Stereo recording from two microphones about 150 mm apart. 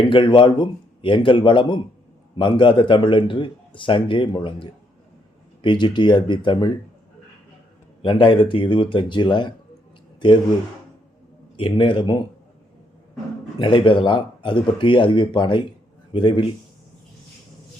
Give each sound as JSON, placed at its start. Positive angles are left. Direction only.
{"t": 0.0, "sound": "a man's voice", "side_deg": 35}
{"t": 8.0, "sound": "a man's voice", "side_deg": 35}
{"t": 11.5, "sound": "a man's voice", "side_deg": 35}
{"t": 13.6, "sound": "a man's voice", "side_deg": 35}